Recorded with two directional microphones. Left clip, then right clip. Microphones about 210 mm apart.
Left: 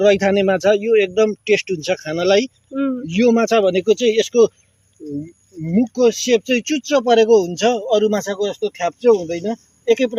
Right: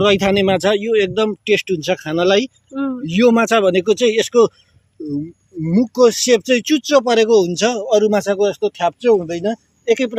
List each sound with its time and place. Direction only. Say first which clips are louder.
0.0 s speech: even; 30° right (ahead or behind)
2.7 s a sound: left 1 dB; 5° left (ahead or behind)
3.1 s speech: right 2 dB; 35° right (ahead or behind)
5.6 s speech: right 3 dB; 35° right (ahead or behind)